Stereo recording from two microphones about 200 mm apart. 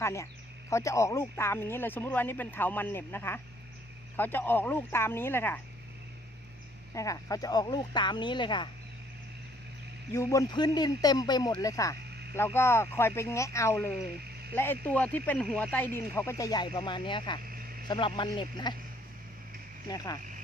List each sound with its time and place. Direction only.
0.0 s speech: 15° left (ahead or behind)
6.9 s speech: 15° left (ahead or behind)
10.1 s speech: 15° left (ahead or behind)
17.4 s a sound: 45° right (ahead or behind)
17.8 s speech: 25° left (ahead or behind)
19.9 s speech: 20° left (ahead or behind)